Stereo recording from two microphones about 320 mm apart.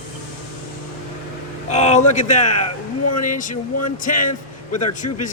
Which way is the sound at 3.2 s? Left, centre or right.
Left.